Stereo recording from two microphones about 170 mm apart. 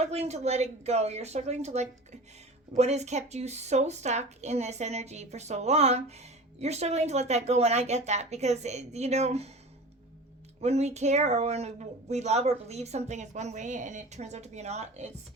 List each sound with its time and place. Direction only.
0.0 s speech: 40° right (ahead or behind)
10.6 s speech: 40° right (ahead or behind)